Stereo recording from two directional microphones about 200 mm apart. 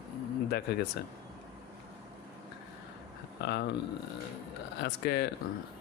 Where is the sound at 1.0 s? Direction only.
55° left (ahead or behind).